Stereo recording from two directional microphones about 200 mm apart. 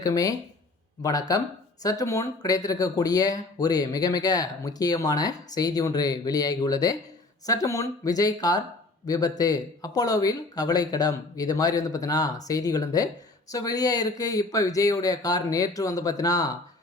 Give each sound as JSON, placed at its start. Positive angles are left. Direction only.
{"t": 0.0, "sound": "speech", "side_deg": 15}